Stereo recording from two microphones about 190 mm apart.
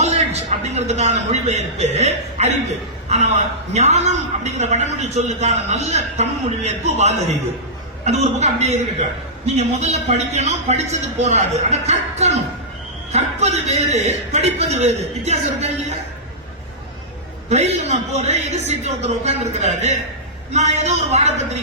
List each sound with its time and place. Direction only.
0.0 s a man's voice: 35° right (ahead or behind)
17.5 s a man's voice: 35° right (ahead or behind)